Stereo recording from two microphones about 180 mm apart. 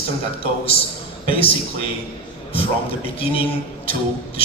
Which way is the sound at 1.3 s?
30° left (ahead or behind).